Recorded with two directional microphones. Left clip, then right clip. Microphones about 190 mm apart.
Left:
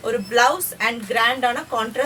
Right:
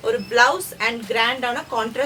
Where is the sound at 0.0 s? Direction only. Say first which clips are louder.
Right 1 dB; 15° right (ahead or behind).